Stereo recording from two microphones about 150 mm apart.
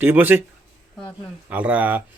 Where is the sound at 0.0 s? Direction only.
10° right (ahead or behind).